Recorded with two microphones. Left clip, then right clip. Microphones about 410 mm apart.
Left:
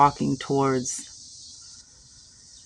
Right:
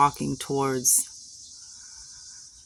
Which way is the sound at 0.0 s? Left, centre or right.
Right.